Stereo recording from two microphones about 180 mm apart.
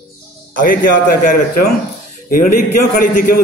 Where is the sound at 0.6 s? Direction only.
50° left (ahead or behind).